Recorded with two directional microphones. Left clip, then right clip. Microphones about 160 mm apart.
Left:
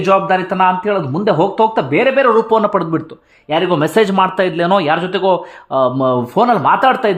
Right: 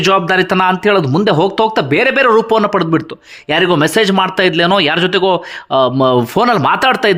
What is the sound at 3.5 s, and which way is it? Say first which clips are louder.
Speech: right 3 dB; 25° right (ahead or behind).